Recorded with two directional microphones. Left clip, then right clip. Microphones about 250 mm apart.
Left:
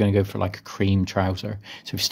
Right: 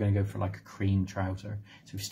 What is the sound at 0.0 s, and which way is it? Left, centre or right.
Speech, left.